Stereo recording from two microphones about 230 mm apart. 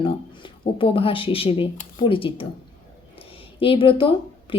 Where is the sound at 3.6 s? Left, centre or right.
Left.